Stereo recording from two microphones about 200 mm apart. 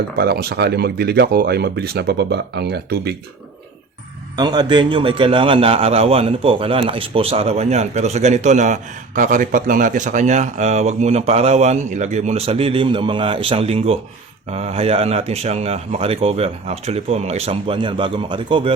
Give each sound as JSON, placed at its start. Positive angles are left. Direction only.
{"t": 0.2, "sound": "speech", "side_deg": -50}
{"t": 4.4, "sound": "a man's voice", "side_deg": -20}